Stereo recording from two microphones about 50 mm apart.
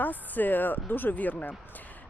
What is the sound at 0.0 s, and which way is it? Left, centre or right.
Speech, left.